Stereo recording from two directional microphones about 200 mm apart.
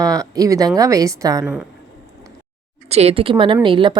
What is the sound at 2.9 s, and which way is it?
Speech, 30° right (ahead or behind).